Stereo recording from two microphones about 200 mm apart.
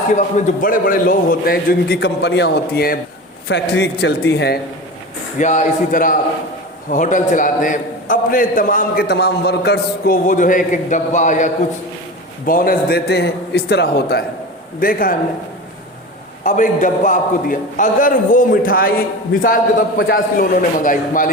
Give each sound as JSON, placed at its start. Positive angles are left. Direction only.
{"t": 0.2, "sound": "a man's voice", "side_deg": 40}
{"t": 5.4, "sound": "a man's voice", "side_deg": 40}
{"t": 16.4, "sound": "a man's voice", "side_deg": 40}